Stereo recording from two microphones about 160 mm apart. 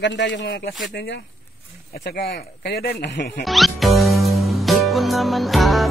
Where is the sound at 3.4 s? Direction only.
Centre (ahead or behind).